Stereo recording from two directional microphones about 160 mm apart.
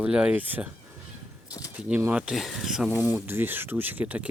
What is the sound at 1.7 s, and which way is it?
Speech, 10° right (ahead or behind).